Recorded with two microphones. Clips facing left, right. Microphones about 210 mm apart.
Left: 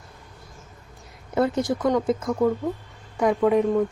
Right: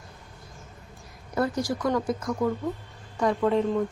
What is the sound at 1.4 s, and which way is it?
Speech, 25° left (ahead or behind).